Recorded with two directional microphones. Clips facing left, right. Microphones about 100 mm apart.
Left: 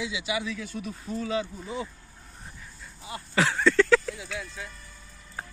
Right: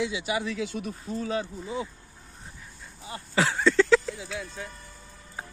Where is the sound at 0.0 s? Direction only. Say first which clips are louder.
Right 2 dB; 45° right (ahead or behind); by 0.9 s 65° right (ahead or behind).